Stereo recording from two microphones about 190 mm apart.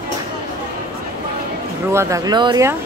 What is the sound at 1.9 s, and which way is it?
Speech, 15° right (ahead or behind).